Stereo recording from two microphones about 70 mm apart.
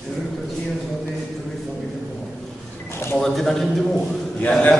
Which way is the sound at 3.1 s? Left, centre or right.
Centre.